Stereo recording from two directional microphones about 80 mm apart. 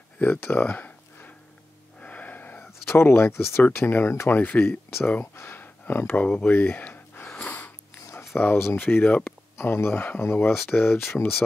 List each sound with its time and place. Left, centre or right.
0.2 s a sound: left
2.9 s speech: left
7.3 s sniff: left
8.4 s speech: left